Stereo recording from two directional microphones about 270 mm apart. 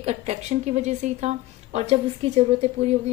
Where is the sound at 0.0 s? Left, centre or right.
Right.